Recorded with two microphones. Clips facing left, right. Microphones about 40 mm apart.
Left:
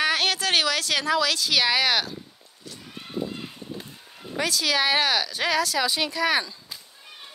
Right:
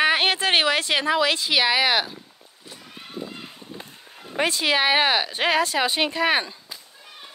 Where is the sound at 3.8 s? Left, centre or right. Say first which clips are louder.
Right 1 dB; centre.